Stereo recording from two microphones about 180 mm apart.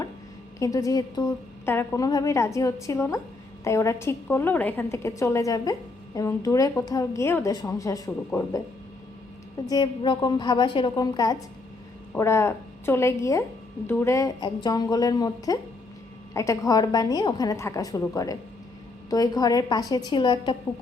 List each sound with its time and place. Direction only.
0.6 s a woman's voice: 20° left (ahead or behind)
9.6 s a woman's voice: 20° left (ahead or behind)